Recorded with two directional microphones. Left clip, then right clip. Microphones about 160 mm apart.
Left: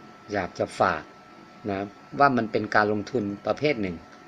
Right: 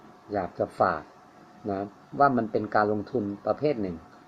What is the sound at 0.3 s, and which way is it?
Speech, 30° left (ahead or behind).